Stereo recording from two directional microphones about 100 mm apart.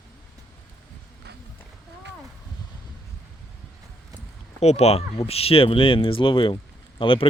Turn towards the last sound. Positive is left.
turn(degrees=60)  # may be behind; listen again after turning